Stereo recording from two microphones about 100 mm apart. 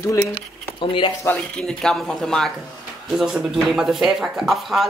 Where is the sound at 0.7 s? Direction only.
60° left (ahead or behind).